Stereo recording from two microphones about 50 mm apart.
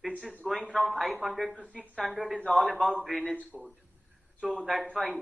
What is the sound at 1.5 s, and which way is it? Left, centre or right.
Speech, left.